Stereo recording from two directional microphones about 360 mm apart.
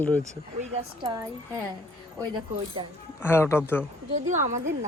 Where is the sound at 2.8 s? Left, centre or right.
Centre.